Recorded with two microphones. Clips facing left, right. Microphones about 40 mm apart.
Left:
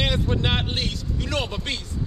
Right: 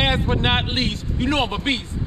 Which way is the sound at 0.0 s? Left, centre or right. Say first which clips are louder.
Right 4 dB; right.